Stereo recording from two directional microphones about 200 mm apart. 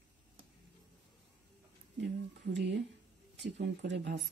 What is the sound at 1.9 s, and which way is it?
Speech, 60° right (ahead or behind).